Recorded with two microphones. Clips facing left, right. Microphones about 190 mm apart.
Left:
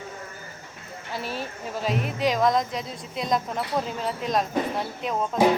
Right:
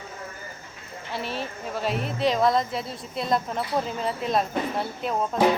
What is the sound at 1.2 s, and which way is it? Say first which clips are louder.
Speech: right 1 dB; 5° left (ahead or behind).